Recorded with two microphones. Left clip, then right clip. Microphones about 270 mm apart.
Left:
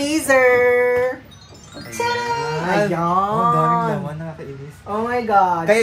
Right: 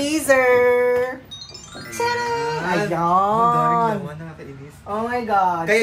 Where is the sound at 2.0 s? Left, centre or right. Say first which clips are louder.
Left 1 dB; right.